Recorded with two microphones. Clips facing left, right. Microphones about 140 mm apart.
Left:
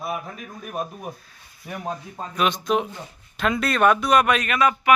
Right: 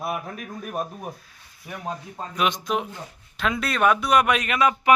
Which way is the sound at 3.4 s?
Centre (ahead or behind).